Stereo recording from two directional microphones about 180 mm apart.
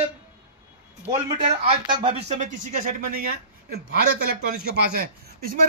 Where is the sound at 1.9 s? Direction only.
30° right (ahead or behind); by 4.4 s 55° right (ahead or behind).